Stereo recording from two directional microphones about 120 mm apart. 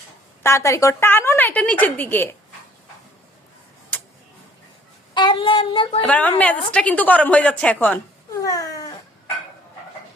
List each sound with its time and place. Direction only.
0.4 s a woman's voice: 25° left (ahead or behind)
5.1 s child singing: 40° left (ahead or behind)
6.0 s a woman's voice: 10° left (ahead or behind)
8.3 s cat: 30° left (ahead or behind)